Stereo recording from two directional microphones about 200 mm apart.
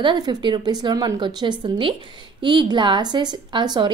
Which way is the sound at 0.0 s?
20° right (ahead or behind).